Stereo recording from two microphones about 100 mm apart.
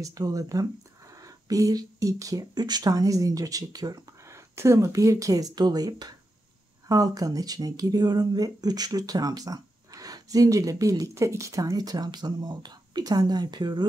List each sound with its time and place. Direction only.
0.0 s speech: 40° right (ahead or behind)